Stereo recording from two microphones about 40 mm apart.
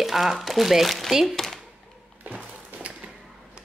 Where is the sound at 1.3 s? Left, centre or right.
Centre.